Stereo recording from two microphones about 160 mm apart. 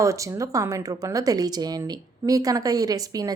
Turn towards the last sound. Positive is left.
turn(degrees=-25)  # may be behind; listen again after turning